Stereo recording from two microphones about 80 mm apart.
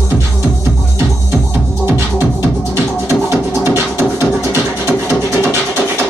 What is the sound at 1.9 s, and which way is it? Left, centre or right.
Music, right.